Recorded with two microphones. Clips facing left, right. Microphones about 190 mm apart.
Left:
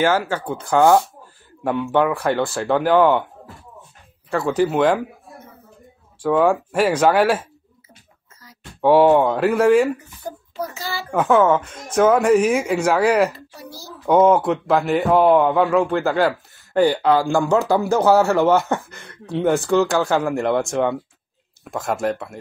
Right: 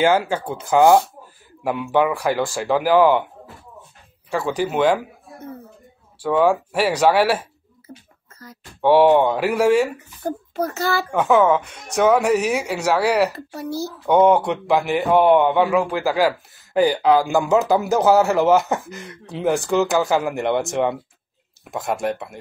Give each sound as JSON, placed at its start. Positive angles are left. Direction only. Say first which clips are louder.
{"t": 0.0, "sound": "speech", "louder": "right 1 dB", "side_deg": -10}
{"t": 4.4, "sound": "speech", "louder": "left 2 dB", "side_deg": 0}
{"t": 6.3, "sound": "speech", "louder": "even", "side_deg": -5}
{"t": 8.8, "sound": "speech", "louder": "even", "side_deg": 0}
{"t": 10.2, "sound": "a child's voice", "louder": "right 6 dB", "side_deg": -60}
{"t": 11.1, "sound": "speech", "louder": "left 1 dB", "side_deg": 0}